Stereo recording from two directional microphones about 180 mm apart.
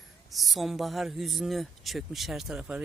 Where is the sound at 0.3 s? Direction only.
Centre (ahead or behind).